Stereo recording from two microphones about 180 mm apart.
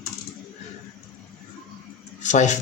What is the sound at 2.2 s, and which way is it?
Speech, 40° left (ahead or behind).